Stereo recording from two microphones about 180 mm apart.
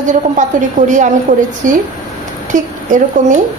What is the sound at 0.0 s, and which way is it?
A woman's voice, 45° right (ahead or behind).